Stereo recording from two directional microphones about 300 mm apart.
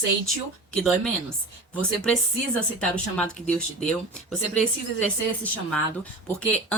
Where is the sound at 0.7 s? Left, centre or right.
Centre.